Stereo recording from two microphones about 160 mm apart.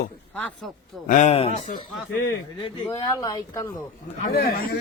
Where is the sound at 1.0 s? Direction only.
55° left (ahead or behind).